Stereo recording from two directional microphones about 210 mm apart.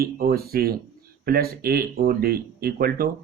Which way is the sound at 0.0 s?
45° right (ahead or behind).